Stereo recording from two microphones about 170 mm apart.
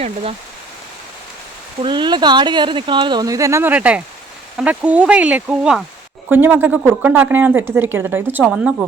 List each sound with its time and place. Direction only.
0.0 s speech: 40° right (ahead or behind)
1.8 s speech: 25° right (ahead or behind); by 8.7 s 5° right (ahead or behind)